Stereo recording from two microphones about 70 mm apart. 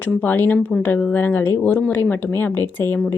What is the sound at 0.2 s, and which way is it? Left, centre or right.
A woman's voice, left.